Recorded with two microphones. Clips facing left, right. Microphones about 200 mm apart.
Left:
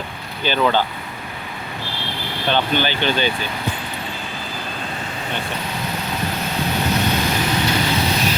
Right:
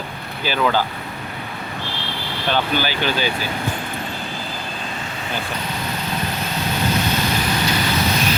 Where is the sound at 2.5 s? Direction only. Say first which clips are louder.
Left 1 dB; 5° right (ahead or behind).